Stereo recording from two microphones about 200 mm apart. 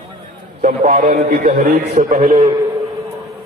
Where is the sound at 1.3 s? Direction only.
45° right (ahead or behind).